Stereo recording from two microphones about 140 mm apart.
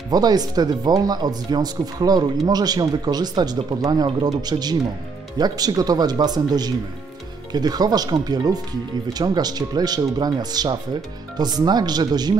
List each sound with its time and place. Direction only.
0.1 s speech: 30° right (ahead or behind)